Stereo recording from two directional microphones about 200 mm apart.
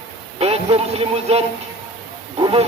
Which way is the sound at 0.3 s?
30° right (ahead or behind).